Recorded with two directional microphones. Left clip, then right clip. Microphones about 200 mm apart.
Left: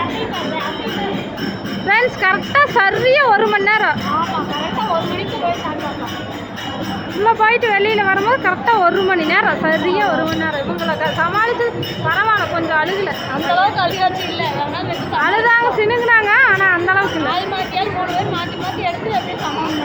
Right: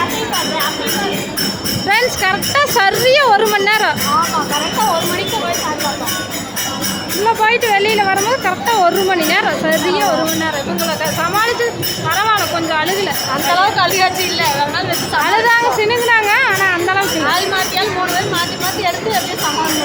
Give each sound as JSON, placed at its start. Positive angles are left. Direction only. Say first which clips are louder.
{"t": 1.9, "sound": "a child's voice", "louder": "even", "side_deg": -20}
{"t": 7.3, "sound": "speech", "louder": "even", "side_deg": -20}
{"t": 13.5, "sound": "speech", "louder": "right 2 dB", "side_deg": -45}
{"t": 15.1, "sound": "speech", "louder": "right 1 dB", "side_deg": -20}